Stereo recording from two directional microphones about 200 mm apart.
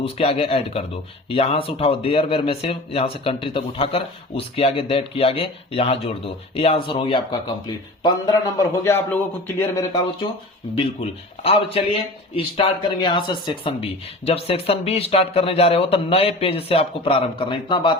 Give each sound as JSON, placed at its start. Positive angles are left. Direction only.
{"t": 0.0, "sound": "a man's voice", "side_deg": 30}